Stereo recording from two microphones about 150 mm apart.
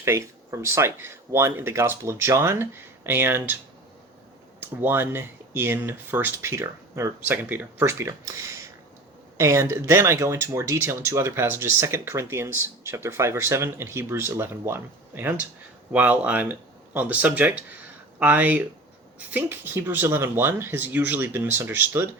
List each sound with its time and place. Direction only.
0.0 s speech: 15° right (ahead or behind)
4.6 s speech: 15° right (ahead or behind)